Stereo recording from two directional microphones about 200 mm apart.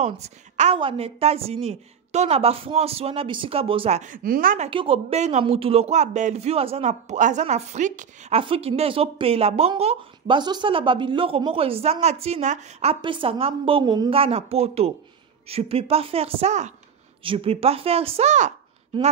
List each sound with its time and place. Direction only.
0.0 s a woman's voice: 35° right (ahead or behind)
4.6 s speech: 25° right (ahead or behind)
13.0 s a woman's voice: 25° right (ahead or behind)